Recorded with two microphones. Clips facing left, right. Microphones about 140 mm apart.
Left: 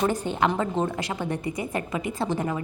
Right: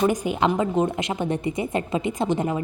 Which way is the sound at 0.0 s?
10° right (ahead or behind).